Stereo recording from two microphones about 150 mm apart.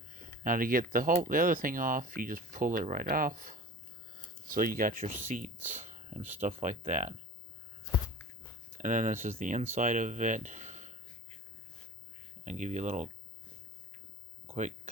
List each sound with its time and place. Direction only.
0.1 s speech: 65° right (ahead or behind)
8.8 s speech: 55° right (ahead or behind)
12.5 s speech: 55° right (ahead or behind)
14.4 s a sound: 50° right (ahead or behind)